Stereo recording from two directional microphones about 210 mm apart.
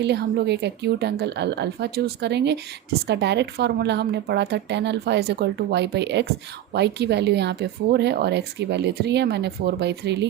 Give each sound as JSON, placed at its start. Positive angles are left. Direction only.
{"t": 0.0, "sound": "speech", "side_deg": -55}